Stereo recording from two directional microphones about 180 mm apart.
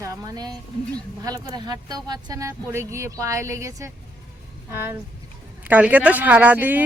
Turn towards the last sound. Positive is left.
turn(degrees=-10)  # may be behind; listen again after turning